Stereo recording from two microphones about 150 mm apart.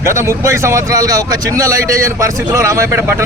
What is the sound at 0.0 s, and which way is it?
A man's voice, 20° right (ahead or behind).